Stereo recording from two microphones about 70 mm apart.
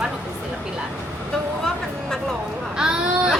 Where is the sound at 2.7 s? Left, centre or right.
Centre.